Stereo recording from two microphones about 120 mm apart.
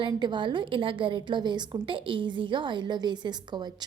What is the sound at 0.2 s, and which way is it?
A woman's voice, 40° right (ahead or behind).